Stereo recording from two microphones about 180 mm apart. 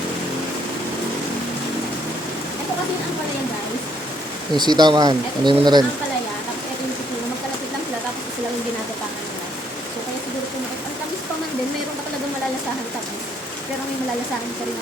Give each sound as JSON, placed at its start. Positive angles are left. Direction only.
{"t": 4.5, "sound": "speech", "side_deg": -25}